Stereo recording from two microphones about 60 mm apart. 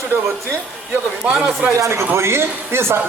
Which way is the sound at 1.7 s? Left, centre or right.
Right.